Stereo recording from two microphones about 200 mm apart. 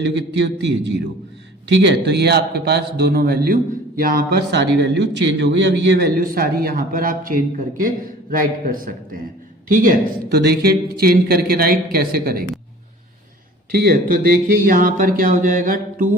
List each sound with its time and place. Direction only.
0.0 s a man's voice: 60° right (ahead or behind)
14.6 s a man's voice: 45° right (ahead or behind)